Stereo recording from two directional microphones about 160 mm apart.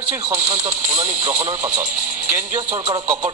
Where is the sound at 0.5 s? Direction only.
45° right (ahead or behind).